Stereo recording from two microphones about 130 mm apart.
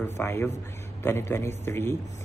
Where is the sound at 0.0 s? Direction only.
20° left (ahead or behind).